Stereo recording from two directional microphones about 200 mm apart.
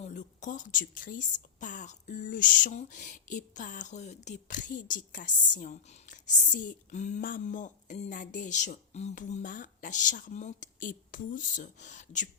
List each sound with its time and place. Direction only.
0.0 s a woman's voice: 40° left (ahead or behind)